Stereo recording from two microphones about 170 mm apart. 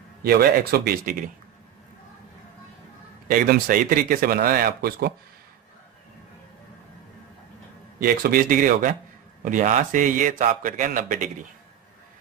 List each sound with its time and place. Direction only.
0.2 s speech: 65° right (ahead or behind)
3.2 s speech: 55° right (ahead or behind)
7.9 s a man's voice: 60° right (ahead or behind)